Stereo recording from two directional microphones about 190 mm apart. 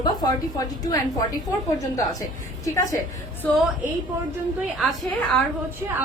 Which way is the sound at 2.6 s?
15° left (ahead or behind).